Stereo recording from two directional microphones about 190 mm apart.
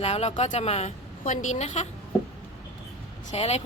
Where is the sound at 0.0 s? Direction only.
35° left (ahead or behind).